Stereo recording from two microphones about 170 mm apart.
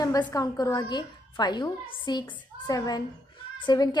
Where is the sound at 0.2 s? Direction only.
20° left (ahead or behind).